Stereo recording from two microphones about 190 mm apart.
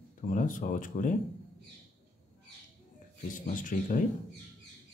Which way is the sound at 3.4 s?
45° left (ahead or behind).